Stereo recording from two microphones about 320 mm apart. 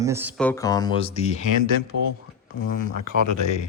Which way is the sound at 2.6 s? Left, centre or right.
Left.